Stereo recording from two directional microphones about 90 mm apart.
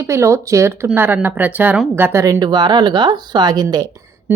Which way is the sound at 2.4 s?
55° right (ahead or behind).